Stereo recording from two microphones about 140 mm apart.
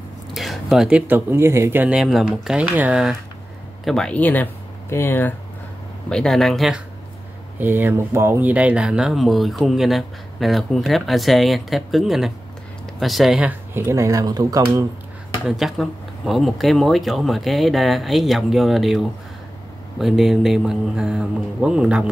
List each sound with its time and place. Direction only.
0.3 s speech: centre (ahead or behind); by 5.3 s 15° left (ahead or behind)
6.0 s speech: 5° left (ahead or behind)
7.5 s speech: 15° right (ahead or behind)
15.4 s speech: centre (ahead or behind)